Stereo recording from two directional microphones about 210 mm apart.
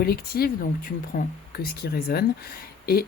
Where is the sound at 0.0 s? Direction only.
45° left (ahead or behind).